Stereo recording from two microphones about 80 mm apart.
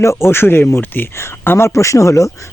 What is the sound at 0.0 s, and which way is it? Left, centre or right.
Speech, left.